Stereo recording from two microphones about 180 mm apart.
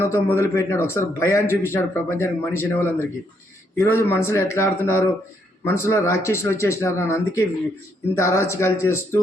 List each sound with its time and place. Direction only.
0.0 s speech: 15° left (ahead or behind)